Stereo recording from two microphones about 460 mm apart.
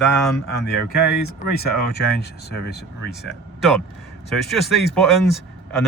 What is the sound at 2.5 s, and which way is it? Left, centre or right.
Speech, left.